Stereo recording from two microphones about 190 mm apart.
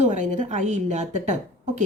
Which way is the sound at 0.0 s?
40° right (ahead or behind).